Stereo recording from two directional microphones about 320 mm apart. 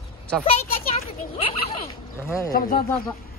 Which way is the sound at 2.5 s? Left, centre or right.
Left.